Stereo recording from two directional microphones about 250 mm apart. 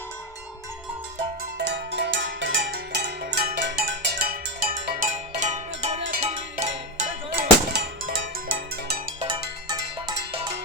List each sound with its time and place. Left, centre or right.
1.5 s music: right
7.3 s music: right
9.2 s music: centre